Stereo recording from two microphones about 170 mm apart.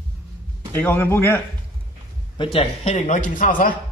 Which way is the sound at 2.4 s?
35° left (ahead or behind).